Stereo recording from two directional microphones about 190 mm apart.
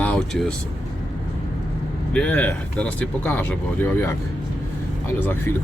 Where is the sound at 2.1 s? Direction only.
5° left (ahead or behind).